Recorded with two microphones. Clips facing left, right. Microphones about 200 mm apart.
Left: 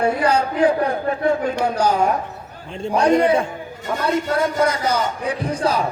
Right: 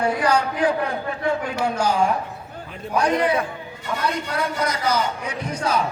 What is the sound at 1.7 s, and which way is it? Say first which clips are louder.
Speech: left 1 dB; 40° left (ahead or behind).